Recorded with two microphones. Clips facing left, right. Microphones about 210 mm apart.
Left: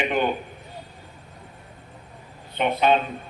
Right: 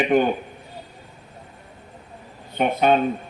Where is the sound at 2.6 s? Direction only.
45° right (ahead or behind).